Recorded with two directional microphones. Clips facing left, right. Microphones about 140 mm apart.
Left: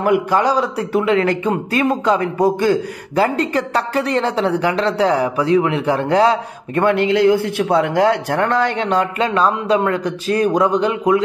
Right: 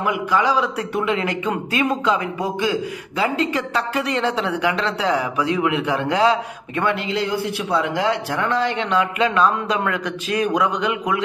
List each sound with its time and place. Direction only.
0.0 s a man's voice: 45° left (ahead or behind)